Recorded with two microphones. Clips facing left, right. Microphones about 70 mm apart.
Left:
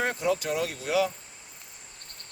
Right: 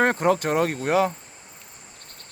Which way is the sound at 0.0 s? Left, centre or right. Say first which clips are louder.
Right 7 dB; right.